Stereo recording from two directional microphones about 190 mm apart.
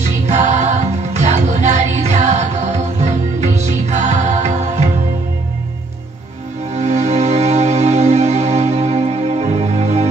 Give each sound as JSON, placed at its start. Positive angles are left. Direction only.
{"t": 0.3, "sound": "music", "side_deg": -35}
{"t": 6.7, "sound": "music", "side_deg": -35}